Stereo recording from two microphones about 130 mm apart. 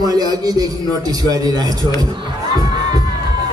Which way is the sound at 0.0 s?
30° right (ahead or behind).